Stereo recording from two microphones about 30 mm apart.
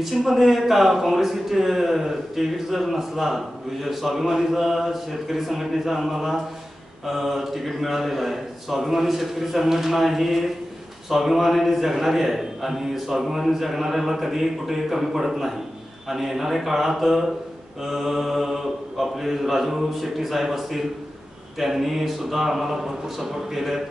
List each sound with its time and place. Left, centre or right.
0.0 s speech: centre